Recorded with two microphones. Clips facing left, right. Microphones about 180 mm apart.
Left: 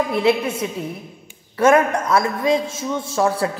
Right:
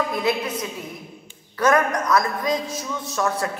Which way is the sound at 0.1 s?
25° left (ahead or behind).